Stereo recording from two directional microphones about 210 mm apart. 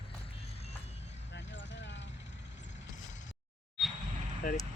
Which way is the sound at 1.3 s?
60° left (ahead or behind).